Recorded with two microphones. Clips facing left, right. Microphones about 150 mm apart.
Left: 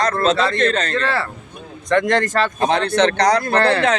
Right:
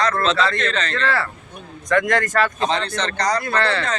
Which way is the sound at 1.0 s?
25° left (ahead or behind).